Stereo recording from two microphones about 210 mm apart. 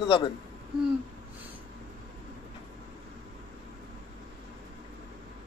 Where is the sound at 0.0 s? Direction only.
25° left (ahead or behind).